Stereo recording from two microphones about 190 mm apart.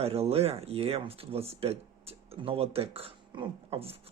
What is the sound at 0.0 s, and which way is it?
Speech, 30° right (ahead or behind).